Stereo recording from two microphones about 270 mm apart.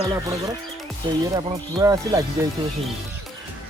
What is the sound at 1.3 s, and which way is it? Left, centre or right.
Speech, centre.